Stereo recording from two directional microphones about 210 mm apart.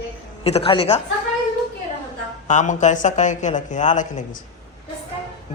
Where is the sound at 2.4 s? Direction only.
35° left (ahead or behind).